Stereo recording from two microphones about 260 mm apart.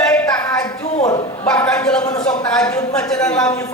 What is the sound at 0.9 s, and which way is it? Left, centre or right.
Bow-wow, left.